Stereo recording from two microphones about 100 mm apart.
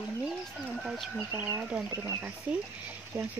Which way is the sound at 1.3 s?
20° right (ahead or behind).